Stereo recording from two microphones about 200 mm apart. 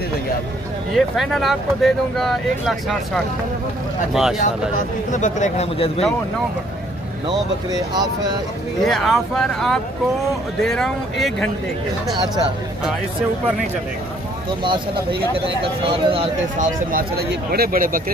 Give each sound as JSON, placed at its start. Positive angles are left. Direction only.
{"t": 0.9, "sound": "speech", "side_deg": 0}
{"t": 5.1, "sound": "speech", "side_deg": 35}
{"t": 7.7, "sound": "speech", "side_deg": -20}
{"t": 8.8, "sound": "speech", "side_deg": 0}
{"t": 14.6, "sound": "speech", "side_deg": -25}
{"t": 16.5, "sound": "speech", "side_deg": -40}